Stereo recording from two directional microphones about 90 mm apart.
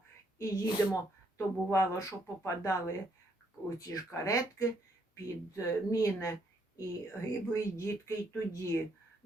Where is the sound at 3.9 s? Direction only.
40° left (ahead or behind).